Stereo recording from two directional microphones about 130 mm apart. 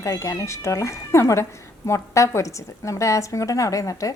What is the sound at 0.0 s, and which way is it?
Speech, 25° left (ahead or behind).